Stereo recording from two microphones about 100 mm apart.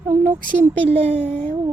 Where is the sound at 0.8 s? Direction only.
90° right.